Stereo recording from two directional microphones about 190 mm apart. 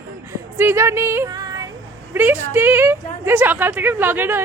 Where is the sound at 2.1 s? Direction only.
10° right (ahead or behind).